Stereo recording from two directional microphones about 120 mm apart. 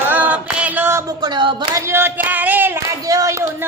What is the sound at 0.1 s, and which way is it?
Female singing, 15° right (ahead or behind).